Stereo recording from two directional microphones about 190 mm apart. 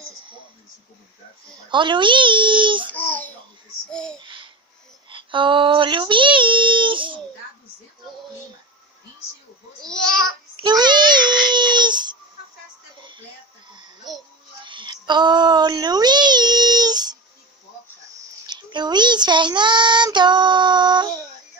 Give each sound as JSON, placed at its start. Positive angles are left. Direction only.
{"t": 1.7, "sound": "a child's voice", "side_deg": -25}
{"t": 2.9, "sound": "a child's voice", "side_deg": 10}
{"t": 4.2, "sound": "babbling", "side_deg": -25}
{"t": 5.1, "sound": "a child's voice", "side_deg": -25}
{"t": 9.8, "sound": "a child's voice", "side_deg": 5}
{"t": 10.6, "sound": "a child's voice", "side_deg": -25}
{"t": 14.1, "sound": "a child's voice", "side_deg": 0}
{"t": 14.6, "sound": "child singing", "side_deg": -25}
{"t": 18.5, "sound": "a child's voice", "side_deg": -20}